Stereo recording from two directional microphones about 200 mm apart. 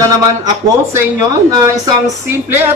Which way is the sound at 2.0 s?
10° right (ahead or behind).